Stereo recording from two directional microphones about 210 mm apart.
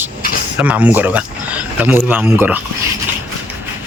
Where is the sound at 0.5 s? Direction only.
5° right (ahead or behind).